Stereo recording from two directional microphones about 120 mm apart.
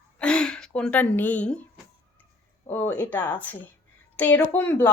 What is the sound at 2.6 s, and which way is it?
A woman's voice, 15° left (ahead or behind).